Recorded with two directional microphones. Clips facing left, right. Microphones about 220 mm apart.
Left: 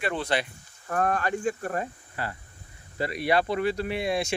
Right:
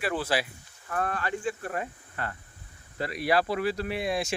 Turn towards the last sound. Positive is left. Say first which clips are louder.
# left 2 dB
turn(degrees=0)  # may be behind; listen again after turning